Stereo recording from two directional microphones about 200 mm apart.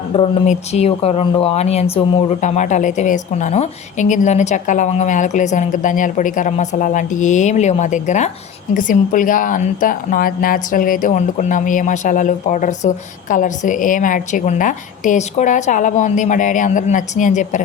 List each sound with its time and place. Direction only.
0.1 s speech: 35° left (ahead or behind)